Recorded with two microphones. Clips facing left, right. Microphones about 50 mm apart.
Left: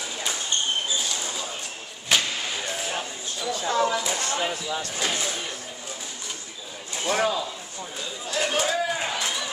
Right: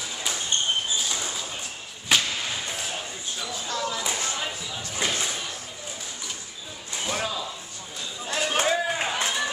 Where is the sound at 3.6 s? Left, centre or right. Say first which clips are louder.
Left 7 dB; left.